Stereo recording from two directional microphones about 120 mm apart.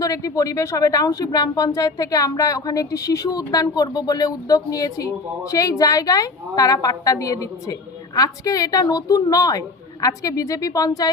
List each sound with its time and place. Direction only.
0.0 s speech: 30° left (ahead or behind)